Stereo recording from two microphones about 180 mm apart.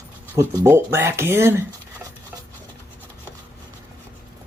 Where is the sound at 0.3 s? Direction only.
15° right (ahead or behind).